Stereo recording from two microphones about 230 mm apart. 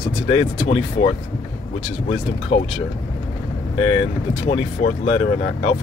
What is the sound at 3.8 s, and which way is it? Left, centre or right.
Speech, left.